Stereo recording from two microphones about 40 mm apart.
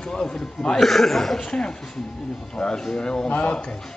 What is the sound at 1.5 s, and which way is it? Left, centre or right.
Speech, left.